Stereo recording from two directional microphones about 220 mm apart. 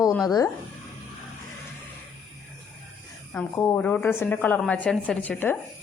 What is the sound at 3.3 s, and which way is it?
Speech, 10° left (ahead or behind).